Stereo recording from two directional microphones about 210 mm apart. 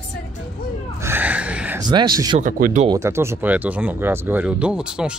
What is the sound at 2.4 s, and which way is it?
Speech, 35° right (ahead or behind).